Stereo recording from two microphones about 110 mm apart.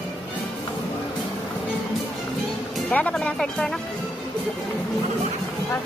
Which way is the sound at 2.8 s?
15° left (ahead or behind).